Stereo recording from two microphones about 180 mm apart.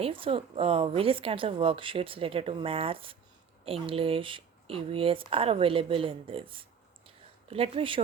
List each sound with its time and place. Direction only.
0.0 s a woman's voice: 30° right (ahead or behind)